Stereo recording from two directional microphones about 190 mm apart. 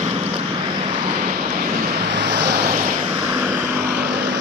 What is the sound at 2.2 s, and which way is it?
Vehicle, 65° right (ahead or behind).